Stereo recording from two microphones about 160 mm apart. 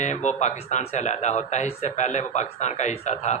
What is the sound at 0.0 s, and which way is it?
Speech, 50° left (ahead or behind).